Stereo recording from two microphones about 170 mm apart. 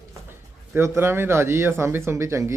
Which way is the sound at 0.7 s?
15° right (ahead or behind).